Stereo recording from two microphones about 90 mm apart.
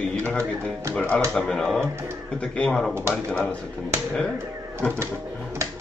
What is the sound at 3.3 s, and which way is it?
Speech, 15° left (ahead or behind).